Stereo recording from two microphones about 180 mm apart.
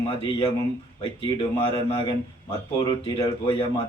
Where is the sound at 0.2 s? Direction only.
25° left (ahead or behind).